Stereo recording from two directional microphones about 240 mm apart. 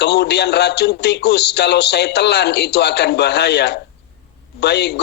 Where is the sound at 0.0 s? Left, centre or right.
Left.